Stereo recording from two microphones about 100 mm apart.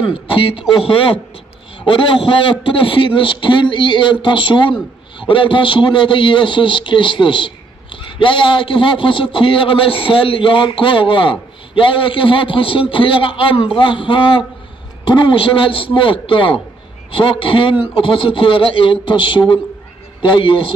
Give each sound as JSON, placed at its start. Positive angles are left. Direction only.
{"t": 0.0, "sound": "a man's voice", "side_deg": 65}
{"t": 2.0, "sound": "a man's voice", "side_deg": 60}